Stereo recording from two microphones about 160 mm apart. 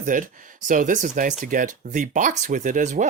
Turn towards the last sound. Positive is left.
turn(degrees=-55)  # may be behind; listen again after turning